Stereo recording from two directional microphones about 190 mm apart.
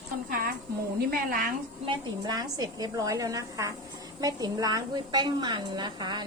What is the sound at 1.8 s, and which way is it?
A woman's voice, 20° right (ahead or behind).